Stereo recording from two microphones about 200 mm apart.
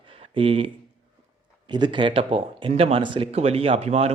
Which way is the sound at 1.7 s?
25° right (ahead or behind).